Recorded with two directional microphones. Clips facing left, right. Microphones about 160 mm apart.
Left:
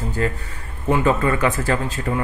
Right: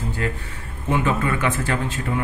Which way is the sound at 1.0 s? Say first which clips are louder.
Left 5 dB; 40° left (ahead or behind).